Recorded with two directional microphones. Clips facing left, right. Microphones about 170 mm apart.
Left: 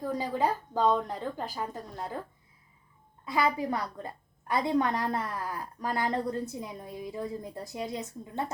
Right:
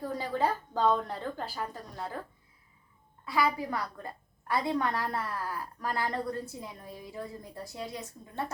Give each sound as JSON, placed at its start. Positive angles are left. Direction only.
{"t": 0.2, "sound": "a woman's voice", "side_deg": 15}
{"t": 3.2, "sound": "a woman's voice", "side_deg": 20}